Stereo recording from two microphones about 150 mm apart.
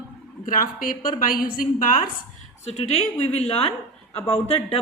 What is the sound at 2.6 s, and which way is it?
A woman's voice, 45° left (ahead or behind).